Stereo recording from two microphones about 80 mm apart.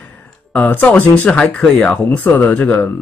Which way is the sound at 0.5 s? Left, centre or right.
Left.